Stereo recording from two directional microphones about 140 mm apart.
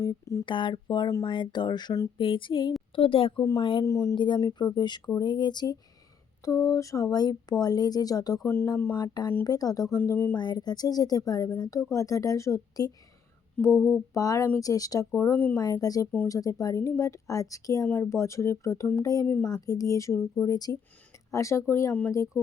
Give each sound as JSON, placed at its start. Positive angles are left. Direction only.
{"t": 0.0, "sound": "speech", "side_deg": 25}
{"t": 0.4, "sound": "speech", "side_deg": 35}
{"t": 3.8, "sound": "speech", "side_deg": 20}
{"t": 9.0, "sound": "speech", "side_deg": 30}
{"t": 10.0, "sound": "speech", "side_deg": 15}
{"t": 10.3, "sound": "speech", "side_deg": 30}
{"t": 19.2, "sound": "speech", "side_deg": 15}
{"t": 19.5, "sound": "speech", "side_deg": 25}